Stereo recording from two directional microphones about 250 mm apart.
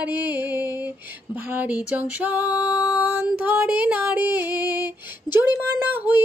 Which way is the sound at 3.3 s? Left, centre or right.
Centre.